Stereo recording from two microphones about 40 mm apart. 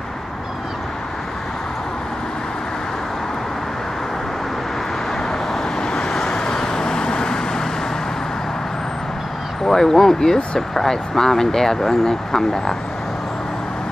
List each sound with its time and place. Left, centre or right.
5.8 s vehicle: centre
9.7 s speech: centre